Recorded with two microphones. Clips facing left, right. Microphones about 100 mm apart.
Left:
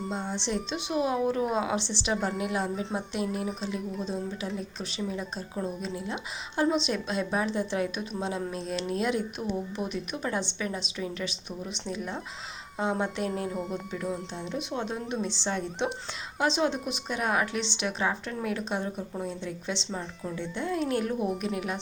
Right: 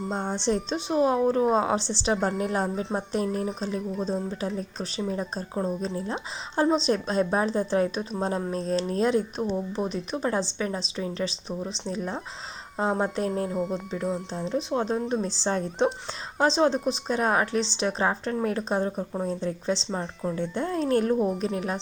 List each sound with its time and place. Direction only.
0.1 s a woman's voice: 45° right (ahead or behind)
13.5 s speech: centre (ahead or behind)
14.3 s a woman's voice: 35° right (ahead or behind)